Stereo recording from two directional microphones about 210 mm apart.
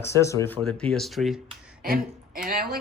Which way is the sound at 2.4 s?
45° right (ahead or behind).